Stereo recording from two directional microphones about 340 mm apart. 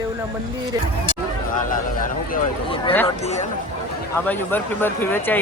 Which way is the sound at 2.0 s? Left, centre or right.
Centre.